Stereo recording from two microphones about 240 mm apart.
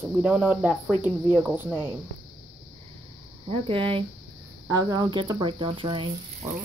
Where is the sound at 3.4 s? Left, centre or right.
Right.